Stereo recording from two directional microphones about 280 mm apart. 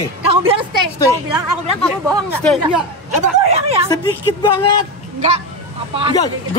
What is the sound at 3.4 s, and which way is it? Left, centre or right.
Speech, right.